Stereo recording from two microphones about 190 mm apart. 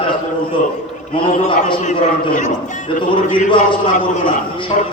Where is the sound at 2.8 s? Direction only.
25° left (ahead or behind).